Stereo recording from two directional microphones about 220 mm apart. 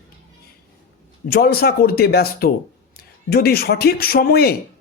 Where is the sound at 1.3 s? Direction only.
45° left (ahead or behind).